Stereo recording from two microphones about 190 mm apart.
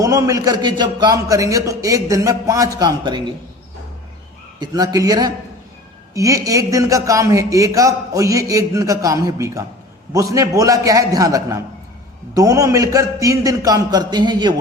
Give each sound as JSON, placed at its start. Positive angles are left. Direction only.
{"t": 0.0, "sound": "a man's voice", "side_deg": -20}
{"t": 4.6, "sound": "a man's voice", "side_deg": -20}